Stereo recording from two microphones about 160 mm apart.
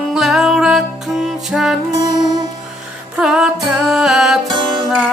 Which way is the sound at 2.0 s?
25° right (ahead or behind).